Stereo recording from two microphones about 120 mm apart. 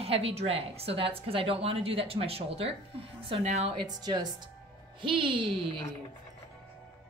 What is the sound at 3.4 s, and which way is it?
Speech, 65° right (ahead or behind).